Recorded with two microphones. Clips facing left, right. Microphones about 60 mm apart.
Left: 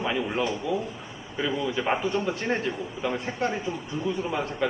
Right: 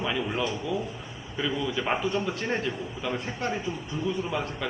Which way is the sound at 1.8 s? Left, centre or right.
Centre.